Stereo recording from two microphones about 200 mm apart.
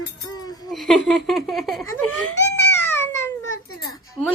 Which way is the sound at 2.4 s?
10° left (ahead or behind).